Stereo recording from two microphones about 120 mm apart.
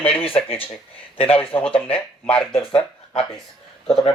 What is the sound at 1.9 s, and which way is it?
Speech, 10° left (ahead or behind).